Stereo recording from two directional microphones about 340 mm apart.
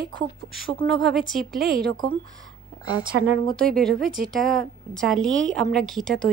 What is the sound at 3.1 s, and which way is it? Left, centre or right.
Speech, right.